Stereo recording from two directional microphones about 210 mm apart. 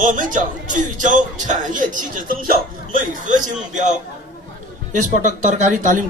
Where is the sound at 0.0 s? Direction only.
40° right (ahead or behind).